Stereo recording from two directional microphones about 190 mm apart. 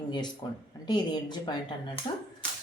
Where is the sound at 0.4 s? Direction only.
20° left (ahead or behind).